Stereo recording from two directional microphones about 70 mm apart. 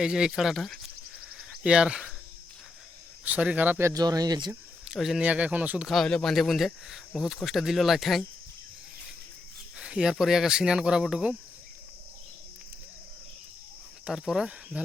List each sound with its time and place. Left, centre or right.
0.0 s speech: centre
1.4 s cricket: centre
3.2 s speech: right
3.9 s speech: right
4.9 s speech: centre
5.2 s speech: right
5.8 s speech: centre
9.7 s speech: centre
14.0 s speech: centre